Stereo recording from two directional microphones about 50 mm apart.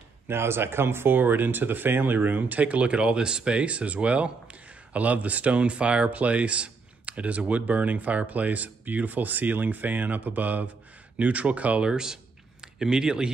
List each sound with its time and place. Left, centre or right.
0.3 s speech: right
11.9 s speech: centre